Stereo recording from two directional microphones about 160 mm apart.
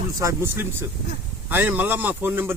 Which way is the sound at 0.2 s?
20° right (ahead or behind).